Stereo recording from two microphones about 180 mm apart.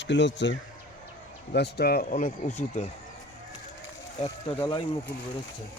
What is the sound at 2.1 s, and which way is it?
Speech, 45° left (ahead or behind).